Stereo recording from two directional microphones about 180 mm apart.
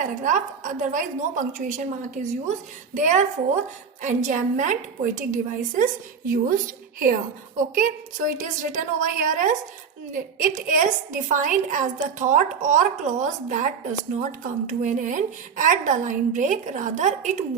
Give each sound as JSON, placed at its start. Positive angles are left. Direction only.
{"t": 0.0, "sound": "a woman's voice", "side_deg": -45}